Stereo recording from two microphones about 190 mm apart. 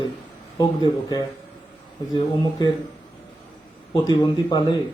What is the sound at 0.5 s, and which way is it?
Speech, 20° left (ahead or behind).